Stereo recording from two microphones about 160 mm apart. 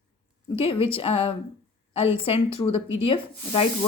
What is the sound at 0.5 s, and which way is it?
Speech, 35° left (ahead or behind).